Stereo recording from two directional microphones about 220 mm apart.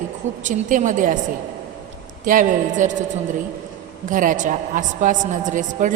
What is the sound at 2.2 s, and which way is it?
Speech, 35° right (ahead or behind).